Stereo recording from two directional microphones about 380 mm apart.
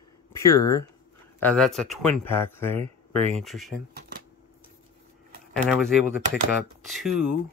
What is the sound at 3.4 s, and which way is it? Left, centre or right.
Speech, centre.